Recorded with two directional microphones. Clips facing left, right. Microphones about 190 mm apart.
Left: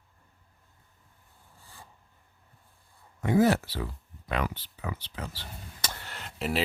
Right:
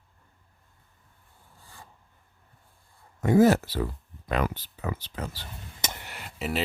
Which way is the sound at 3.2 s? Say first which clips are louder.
Right 4 dB; 45° right (ahead or behind).